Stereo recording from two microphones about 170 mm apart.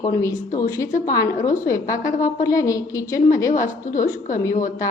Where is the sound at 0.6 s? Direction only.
20° left (ahead or behind).